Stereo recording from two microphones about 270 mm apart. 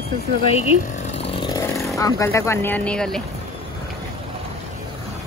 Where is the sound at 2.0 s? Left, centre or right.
Centre.